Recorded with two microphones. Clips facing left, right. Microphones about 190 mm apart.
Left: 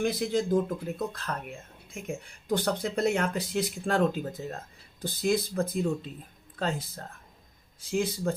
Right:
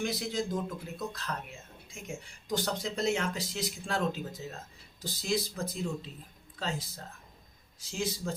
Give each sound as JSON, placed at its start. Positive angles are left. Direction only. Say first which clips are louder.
{"t": 0.0, "sound": "speech", "louder": "left 6 dB", "side_deg": 55}